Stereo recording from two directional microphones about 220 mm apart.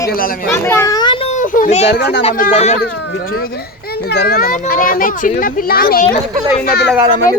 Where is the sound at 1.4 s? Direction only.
35° left (ahead or behind).